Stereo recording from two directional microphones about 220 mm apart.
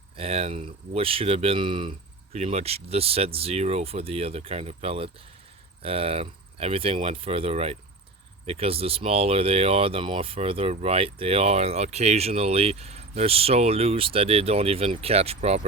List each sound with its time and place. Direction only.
0.2 s speech: 25° right (ahead or behind)